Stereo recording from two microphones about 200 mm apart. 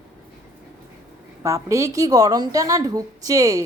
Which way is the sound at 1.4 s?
15° right (ahead or behind).